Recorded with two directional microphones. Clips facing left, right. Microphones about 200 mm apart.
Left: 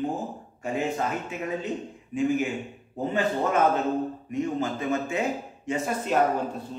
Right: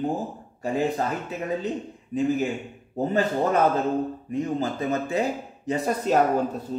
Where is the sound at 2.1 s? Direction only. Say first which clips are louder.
Right 1 dB; 35° right (ahead or behind).